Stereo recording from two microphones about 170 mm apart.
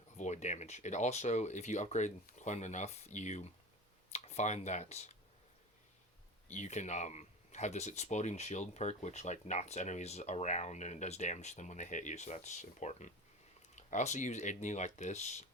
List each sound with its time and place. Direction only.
0.2 s speech: 45° left (ahead or behind)
6.5 s speech: 45° left (ahead or behind)